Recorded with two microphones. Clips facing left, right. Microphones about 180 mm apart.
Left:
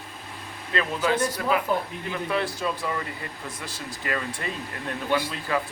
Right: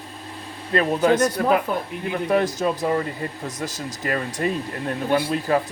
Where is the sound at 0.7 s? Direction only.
45° right (ahead or behind).